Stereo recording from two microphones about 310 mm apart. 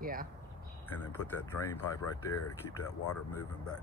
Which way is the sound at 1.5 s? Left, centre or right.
Centre.